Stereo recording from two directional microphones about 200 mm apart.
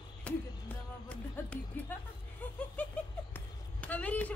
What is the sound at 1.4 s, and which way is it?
Speech, 5° left (ahead or behind).